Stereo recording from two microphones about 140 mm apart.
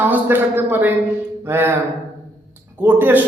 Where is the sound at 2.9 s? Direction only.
15° right (ahead or behind).